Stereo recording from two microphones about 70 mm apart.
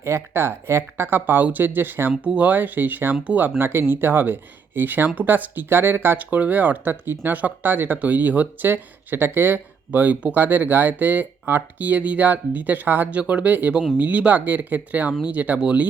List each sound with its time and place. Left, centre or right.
0.0 s speech: right; by 15.9 s centre